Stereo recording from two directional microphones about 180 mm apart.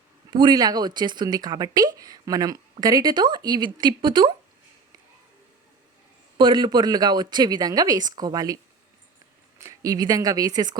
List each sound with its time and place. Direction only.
0.3 s speech: 25° right (ahead or behind)
6.3 s speech: 25° right (ahead or behind)
9.6 s speech: 15° right (ahead or behind)